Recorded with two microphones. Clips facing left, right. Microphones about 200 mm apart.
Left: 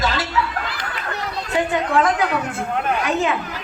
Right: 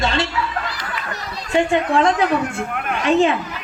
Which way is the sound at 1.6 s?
25° right (ahead or behind).